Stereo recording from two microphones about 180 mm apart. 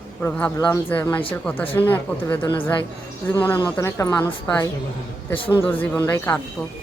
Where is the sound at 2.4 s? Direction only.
25° left (ahead or behind).